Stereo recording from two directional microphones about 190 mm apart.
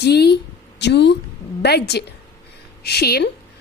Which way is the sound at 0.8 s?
65° left (ahead or behind).